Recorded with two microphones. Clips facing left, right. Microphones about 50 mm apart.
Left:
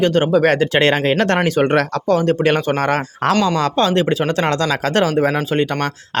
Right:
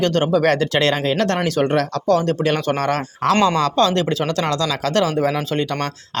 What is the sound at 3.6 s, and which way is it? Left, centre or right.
Speech, left.